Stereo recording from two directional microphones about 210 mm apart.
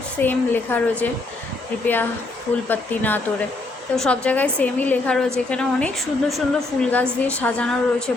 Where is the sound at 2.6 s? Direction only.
10° left (ahead or behind).